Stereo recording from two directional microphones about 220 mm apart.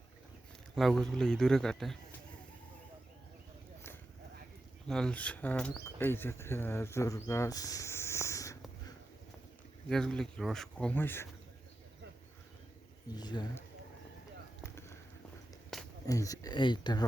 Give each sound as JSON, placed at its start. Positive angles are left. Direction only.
{"t": 0.8, "sound": "speech", "side_deg": 0}
{"t": 4.9, "sound": "speech", "side_deg": 5}
{"t": 9.9, "sound": "speech", "side_deg": 5}
{"t": 13.1, "sound": "speech", "side_deg": 20}
{"t": 14.6, "sound": "a sound", "side_deg": 10}
{"t": 15.7, "sound": "a sound", "side_deg": 0}
{"t": 16.0, "sound": "speech", "side_deg": 15}